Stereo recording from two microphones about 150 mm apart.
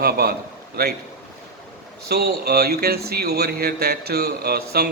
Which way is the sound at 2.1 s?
90° right.